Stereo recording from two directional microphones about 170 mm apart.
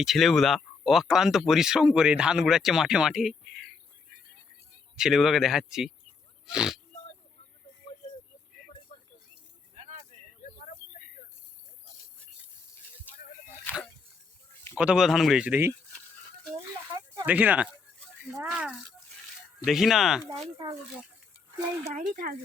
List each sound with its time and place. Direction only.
0.0 s speech: centre (ahead or behind)
4.9 s speech: centre (ahead or behind)
9.7 s vehicle: 40° right (ahead or behind)
13.7 s a sound: 10° left (ahead or behind)
14.8 s speech: 5° right (ahead or behind)
17.2 s speech: 10° right (ahead or behind)
21.8 s speech: 45° right (ahead or behind)